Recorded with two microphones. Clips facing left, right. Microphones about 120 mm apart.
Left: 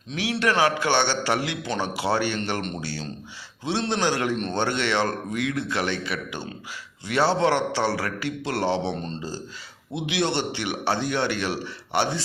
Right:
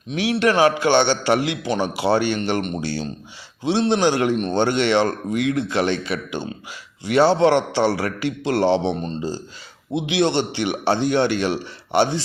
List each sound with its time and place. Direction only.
0.1 s a man's voice: 20° right (ahead or behind)
2.8 s a man's voice: 25° right (ahead or behind)